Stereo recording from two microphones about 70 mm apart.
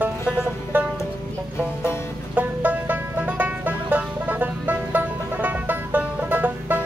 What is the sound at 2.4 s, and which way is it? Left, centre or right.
Music, right.